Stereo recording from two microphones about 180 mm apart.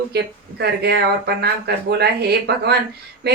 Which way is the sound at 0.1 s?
65° right (ahead or behind).